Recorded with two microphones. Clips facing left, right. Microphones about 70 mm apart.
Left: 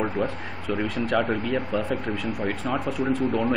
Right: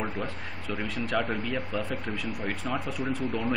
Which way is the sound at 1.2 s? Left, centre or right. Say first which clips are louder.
Left 5 dB; centre.